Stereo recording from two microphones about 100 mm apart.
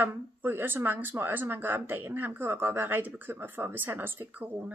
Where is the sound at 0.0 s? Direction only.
20° right (ahead or behind).